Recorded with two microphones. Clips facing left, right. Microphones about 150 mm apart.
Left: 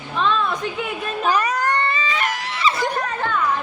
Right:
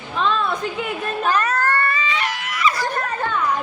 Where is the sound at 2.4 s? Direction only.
30° left (ahead or behind).